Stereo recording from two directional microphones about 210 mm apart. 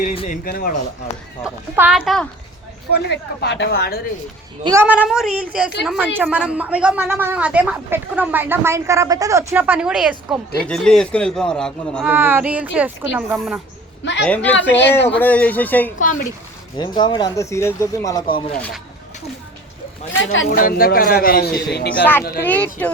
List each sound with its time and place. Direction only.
0.4 s speech: 40° left (ahead or behind)
1.5 s a man's voice: 5° right (ahead or behind)
2.9 s a man's voice: 50° left (ahead or behind)
4.6 s a woman's voice: 10° right (ahead or behind)
12.0 s a woman's voice: 10° right (ahead or behind)
14.0 s a man's voice: 60° left (ahead or behind)
14.3 s speech: 5° left (ahead or behind)
16.0 s speech: 40° left (ahead or behind)
16.7 s speech: 20° left (ahead or behind)
20.5 s a man's voice: 45° left (ahead or behind)
22.4 s speech: 5° left (ahead or behind)